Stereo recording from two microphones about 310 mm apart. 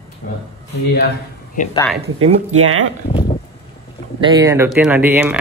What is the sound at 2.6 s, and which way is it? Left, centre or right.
Speech, right.